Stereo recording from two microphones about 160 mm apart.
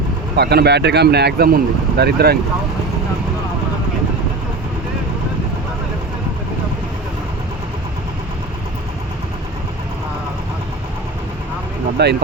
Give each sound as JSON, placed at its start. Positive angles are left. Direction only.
{"t": 0.3, "sound": "speech", "side_deg": -90}
{"t": 12.0, "sound": "speech", "side_deg": -90}